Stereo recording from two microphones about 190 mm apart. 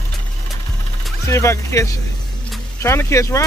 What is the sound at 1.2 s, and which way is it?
Speech, 15° left (ahead or behind).